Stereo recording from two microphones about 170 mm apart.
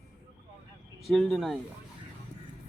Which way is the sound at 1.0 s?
Centre (ahead or behind).